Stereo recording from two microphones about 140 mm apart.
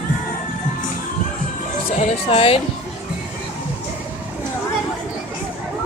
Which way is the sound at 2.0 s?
45° left (ahead or behind).